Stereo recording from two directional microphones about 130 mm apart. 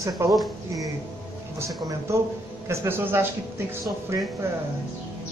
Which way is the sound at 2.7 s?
20° right (ahead or behind).